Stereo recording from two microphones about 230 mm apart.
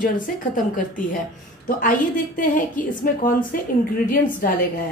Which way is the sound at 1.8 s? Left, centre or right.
Left.